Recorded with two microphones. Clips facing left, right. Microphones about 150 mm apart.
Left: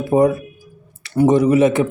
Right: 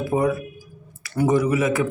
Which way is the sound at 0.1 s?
30° left (ahead or behind).